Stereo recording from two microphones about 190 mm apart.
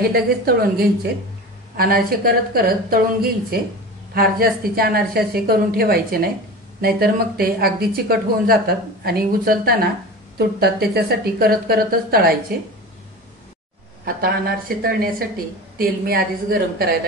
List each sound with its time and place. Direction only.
0.1 s speech: 55° right (ahead or behind)
14.0 s speech: 50° right (ahead or behind)